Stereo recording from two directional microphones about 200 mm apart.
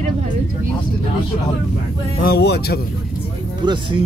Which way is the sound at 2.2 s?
55° left (ahead or behind).